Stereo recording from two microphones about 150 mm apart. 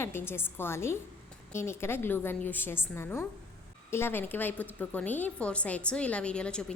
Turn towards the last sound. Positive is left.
turn(degrees=5)  # may be behind; listen again after turning